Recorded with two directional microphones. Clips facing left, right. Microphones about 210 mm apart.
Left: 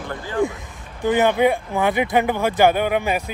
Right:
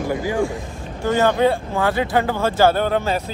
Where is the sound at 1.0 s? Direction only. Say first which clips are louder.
Even; 15° left (ahead or behind).